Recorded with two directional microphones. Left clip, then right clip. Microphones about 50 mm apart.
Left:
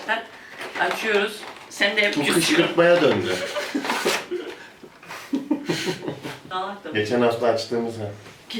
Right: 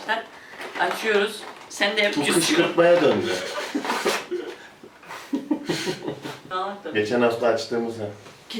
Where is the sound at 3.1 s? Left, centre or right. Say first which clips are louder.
Left 1 dB; centre.